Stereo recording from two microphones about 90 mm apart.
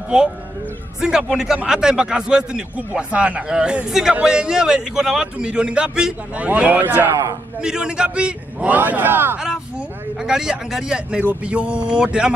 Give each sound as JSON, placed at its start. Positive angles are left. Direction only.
{"t": 0.1, "sound": "a man's voice", "side_deg": -10}
{"t": 9.4, "sound": "a man's voice", "side_deg": -10}